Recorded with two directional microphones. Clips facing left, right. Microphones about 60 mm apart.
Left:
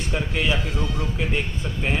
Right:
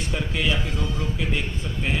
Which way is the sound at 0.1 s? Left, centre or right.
Centre.